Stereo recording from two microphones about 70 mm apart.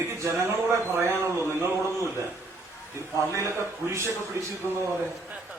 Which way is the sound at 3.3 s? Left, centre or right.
Right.